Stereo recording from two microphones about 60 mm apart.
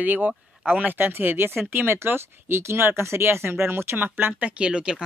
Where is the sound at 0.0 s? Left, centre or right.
Right.